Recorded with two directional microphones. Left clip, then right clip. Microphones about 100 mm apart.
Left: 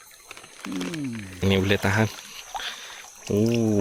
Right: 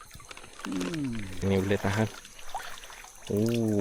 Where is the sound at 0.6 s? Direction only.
5° left (ahead or behind).